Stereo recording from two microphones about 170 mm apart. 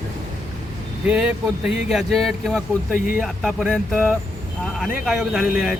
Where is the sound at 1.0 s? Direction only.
5° right (ahead or behind).